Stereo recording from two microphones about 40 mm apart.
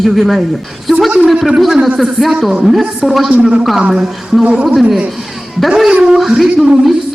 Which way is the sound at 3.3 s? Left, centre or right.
Right.